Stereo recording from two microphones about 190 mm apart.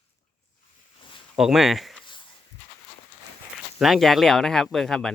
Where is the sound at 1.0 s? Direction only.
25° left (ahead or behind).